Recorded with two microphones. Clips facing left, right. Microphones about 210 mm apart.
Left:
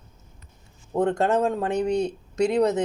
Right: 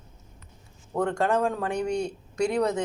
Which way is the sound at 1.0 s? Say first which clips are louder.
Left 3 dB; 20° left (ahead or behind).